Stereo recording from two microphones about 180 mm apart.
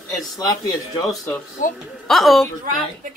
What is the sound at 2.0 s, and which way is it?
Speech, centre (ahead or behind).